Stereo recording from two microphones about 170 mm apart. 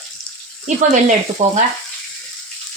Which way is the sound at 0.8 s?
45° right (ahead or behind).